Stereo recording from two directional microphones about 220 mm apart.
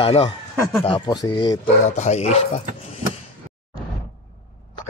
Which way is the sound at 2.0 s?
30° left (ahead or behind).